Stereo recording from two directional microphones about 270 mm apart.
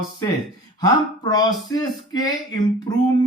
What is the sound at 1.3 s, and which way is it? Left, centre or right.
Speech, centre.